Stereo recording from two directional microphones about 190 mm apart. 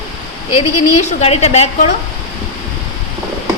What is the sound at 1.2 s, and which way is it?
Speech, 35° left (ahead or behind).